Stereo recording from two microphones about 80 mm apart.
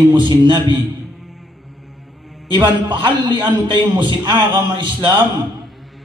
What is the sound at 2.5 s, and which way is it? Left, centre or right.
A man's voice, right.